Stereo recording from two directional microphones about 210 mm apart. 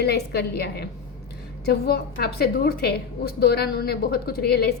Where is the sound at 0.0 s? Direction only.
50° left (ahead or behind).